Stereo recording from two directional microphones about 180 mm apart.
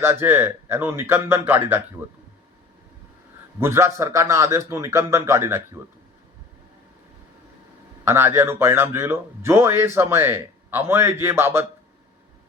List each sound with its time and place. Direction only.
0.0 s speech: 10° right (ahead or behind)
3.6 s speech: 15° right (ahead or behind)
8.0 s speech: 15° right (ahead or behind)